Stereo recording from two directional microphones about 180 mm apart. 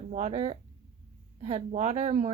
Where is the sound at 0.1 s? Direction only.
40° right (ahead or behind).